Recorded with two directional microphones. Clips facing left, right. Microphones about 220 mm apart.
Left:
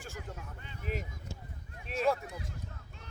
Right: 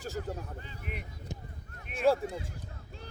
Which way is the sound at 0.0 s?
40° right (ahead or behind).